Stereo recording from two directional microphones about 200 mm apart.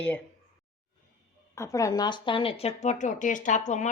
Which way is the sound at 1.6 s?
15° left (ahead or behind).